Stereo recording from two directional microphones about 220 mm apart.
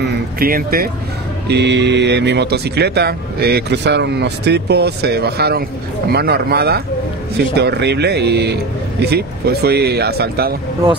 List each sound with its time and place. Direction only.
0.0 s speech: 40° right (ahead or behind)